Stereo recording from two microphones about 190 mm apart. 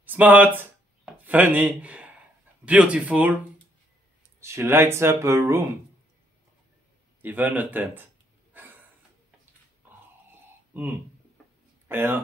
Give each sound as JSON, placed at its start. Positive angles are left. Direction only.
{"t": 0.0, "sound": "speech", "side_deg": -10}
{"t": 4.4, "sound": "speech", "side_deg": -15}
{"t": 7.2, "sound": "speech", "side_deg": -10}
{"t": 9.8, "sound": "a sound", "side_deg": -10}
{"t": 10.7, "sound": "speech", "side_deg": -10}